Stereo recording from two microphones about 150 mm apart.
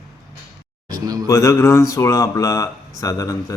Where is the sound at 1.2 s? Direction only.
20° left (ahead or behind).